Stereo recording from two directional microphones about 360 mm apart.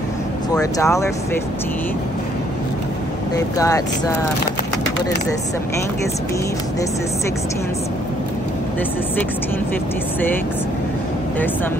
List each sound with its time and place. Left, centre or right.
0.6 s speech: centre
3.3 s speech: centre